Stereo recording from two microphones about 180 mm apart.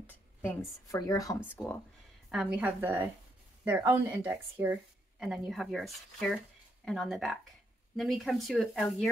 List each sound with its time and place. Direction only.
0.0 s a woman's voice: 15° left (ahead or behind)
2.3 s speech: 5° right (ahead or behind)